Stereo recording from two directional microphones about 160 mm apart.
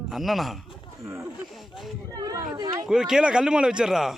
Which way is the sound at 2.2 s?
20° right (ahead or behind).